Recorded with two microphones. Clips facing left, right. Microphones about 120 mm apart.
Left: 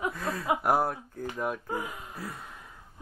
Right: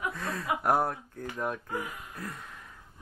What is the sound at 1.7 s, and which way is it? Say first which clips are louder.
Speech: left 2 dB; 25° left (ahead or behind).